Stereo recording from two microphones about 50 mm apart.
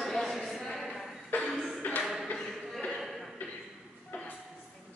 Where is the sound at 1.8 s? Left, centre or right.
Left.